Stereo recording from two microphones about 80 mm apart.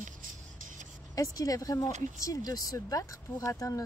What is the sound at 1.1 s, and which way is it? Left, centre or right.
Speech, left.